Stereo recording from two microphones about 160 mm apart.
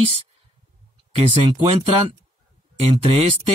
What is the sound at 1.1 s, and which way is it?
Speech, 35° right (ahead or behind).